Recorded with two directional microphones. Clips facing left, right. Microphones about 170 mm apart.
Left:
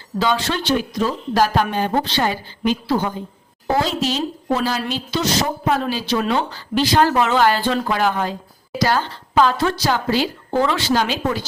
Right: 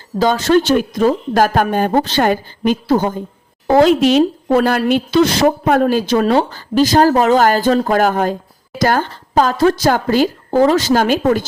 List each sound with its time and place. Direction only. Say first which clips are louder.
0.2 s speech: right 8 dB; 45° right (ahead or behind)
3.8 s a woman's voice: right 12 dB; 60° right (ahead or behind)